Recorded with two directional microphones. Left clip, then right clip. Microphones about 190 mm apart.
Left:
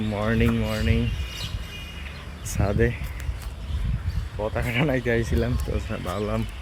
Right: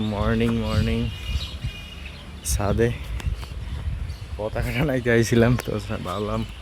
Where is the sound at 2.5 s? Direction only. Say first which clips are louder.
Right 2 dB; 30° right (ahead or behind).